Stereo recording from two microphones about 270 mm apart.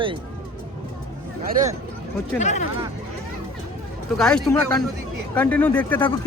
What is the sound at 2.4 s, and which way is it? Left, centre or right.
Speech, left.